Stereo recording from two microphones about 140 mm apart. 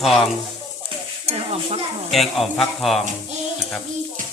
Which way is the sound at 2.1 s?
Centre (ahead or behind).